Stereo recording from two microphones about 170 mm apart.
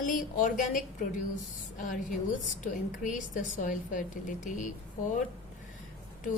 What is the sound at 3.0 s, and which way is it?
A woman's voice, 50° left (ahead or behind).